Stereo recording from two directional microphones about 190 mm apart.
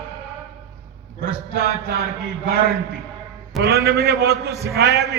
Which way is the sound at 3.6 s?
55° right (ahead or behind).